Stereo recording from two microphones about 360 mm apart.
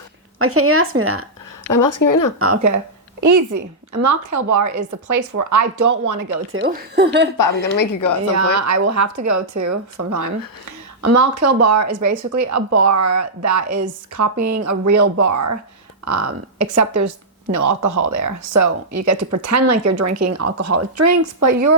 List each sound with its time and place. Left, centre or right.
0.3 s speech: right
1.7 s speech: left
2.4 s a woman's voice: right
6.5 s speech: right
7.3 s speech: left
8.4 s speech: right